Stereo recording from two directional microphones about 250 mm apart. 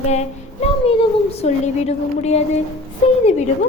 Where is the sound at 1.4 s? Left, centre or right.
Left.